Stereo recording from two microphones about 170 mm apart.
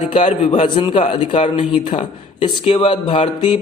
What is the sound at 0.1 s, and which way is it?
A man's voice, 40° left (ahead or behind).